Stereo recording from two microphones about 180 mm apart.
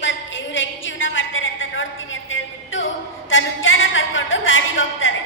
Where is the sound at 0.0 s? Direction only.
90° left.